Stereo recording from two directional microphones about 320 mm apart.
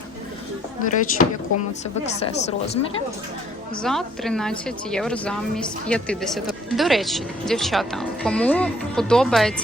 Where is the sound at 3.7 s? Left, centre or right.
Centre.